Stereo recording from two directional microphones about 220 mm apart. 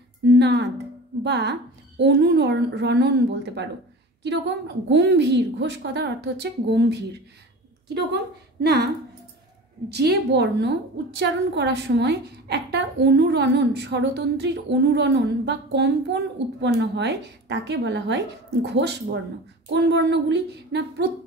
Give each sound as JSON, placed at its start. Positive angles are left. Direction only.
{"t": 0.3, "sound": "a woman's voice", "side_deg": -50}
{"t": 9.8, "sound": "a woman's voice", "side_deg": -50}